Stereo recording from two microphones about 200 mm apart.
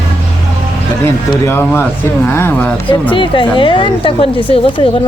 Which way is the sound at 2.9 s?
25° left (ahead or behind).